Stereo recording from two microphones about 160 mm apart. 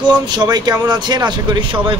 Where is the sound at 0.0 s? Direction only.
30° right (ahead or behind).